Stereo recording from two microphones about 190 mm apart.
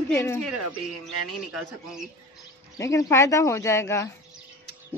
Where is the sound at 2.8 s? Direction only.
15° left (ahead or behind).